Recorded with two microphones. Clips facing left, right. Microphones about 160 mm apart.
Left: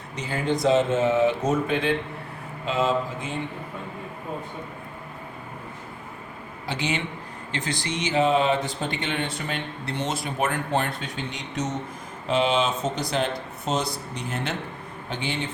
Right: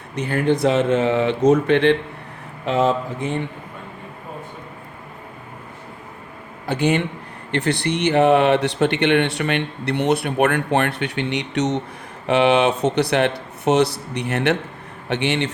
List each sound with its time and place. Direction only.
0.2 s speech: 60° right (ahead or behind)
2.6 s speech: 60° right (ahead or behind)
6.7 s speech: 55° right (ahead or behind); by 15.4 s 75° right (ahead or behind)